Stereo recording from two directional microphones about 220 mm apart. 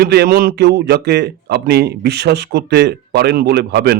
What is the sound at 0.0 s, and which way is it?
A man's voice, 45° right (ahead or behind).